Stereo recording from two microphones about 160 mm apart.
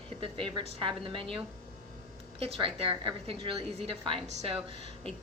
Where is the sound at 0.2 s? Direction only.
30° right (ahead or behind).